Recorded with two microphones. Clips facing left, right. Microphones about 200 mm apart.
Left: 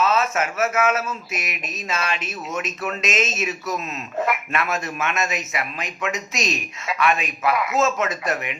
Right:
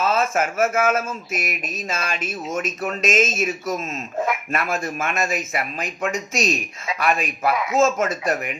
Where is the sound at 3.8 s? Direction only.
45° right (ahead or behind).